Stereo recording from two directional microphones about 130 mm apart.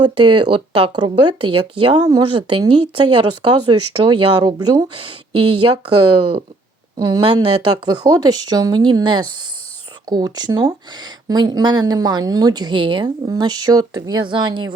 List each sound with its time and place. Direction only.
0.0 s speech: 35° right (ahead or behind)
6.1 s speech: 45° right (ahead or behind)
6.9 s speech: 35° right (ahead or behind)